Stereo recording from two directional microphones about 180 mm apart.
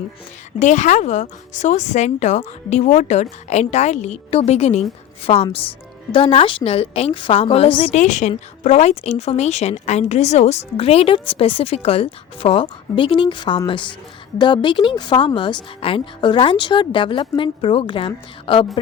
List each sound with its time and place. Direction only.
0.6 s a woman's voice: 40° left (ahead or behind)